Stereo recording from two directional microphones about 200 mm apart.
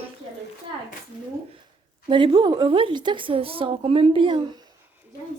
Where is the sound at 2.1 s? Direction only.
25° right (ahead or behind).